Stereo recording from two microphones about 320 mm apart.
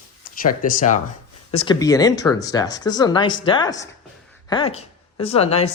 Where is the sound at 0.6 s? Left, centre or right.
Left.